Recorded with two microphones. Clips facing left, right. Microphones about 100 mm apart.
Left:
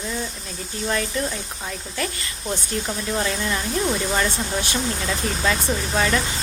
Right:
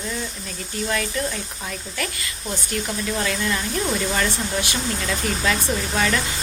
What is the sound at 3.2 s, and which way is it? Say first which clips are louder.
Speech: even; 15° left (ahead or behind).